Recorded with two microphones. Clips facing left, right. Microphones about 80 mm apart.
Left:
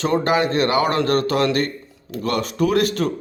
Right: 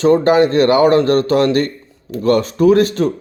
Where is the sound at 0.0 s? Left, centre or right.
Right.